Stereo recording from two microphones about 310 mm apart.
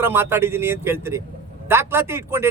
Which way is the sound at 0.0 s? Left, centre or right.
Centre.